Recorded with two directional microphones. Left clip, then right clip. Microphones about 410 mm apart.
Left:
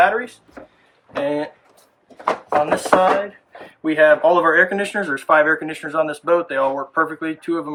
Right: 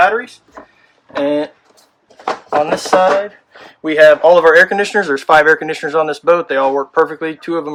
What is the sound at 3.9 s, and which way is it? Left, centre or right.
Speech, right.